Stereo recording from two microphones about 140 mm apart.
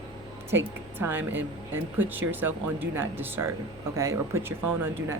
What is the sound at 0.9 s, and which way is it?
Speech, 15° right (ahead or behind).